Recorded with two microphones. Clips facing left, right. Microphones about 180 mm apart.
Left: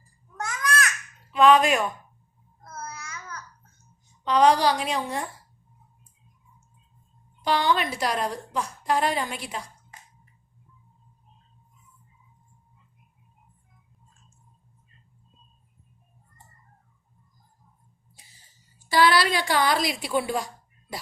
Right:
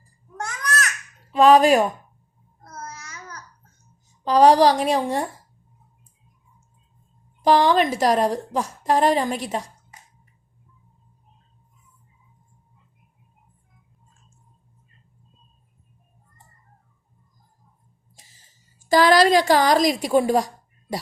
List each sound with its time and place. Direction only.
0.4 s babbling: 40° right (ahead or behind)
2.6 s child singing: 40° right (ahead or behind)
4.2 s a woman's voice: 35° right (ahead or behind)
7.4 s a woman's voice: 40° right (ahead or behind)
18.9 s a woman's voice: 45° right (ahead or behind)